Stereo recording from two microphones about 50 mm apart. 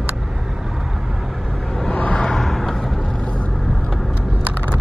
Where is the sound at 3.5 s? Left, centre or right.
Centre.